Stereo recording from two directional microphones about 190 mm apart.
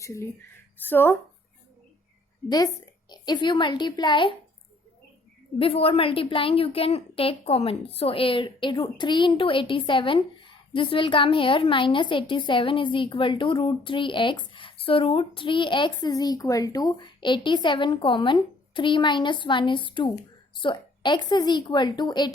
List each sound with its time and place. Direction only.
0.0 s speech: 15° left (ahead or behind)
3.1 s a woman's voice: 25° left (ahead or behind)
5.5 s a woman's voice: 30° left (ahead or behind)